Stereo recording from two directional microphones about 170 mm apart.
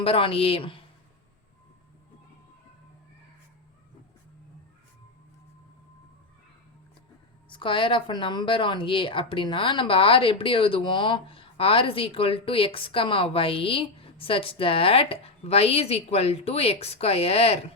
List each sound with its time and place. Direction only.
0.0 s speech: 35° left (ahead or behind)
7.5 s speech: 30° left (ahead or behind)